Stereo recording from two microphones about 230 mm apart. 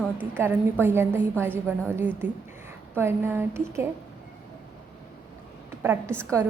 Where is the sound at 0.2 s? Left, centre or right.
Centre.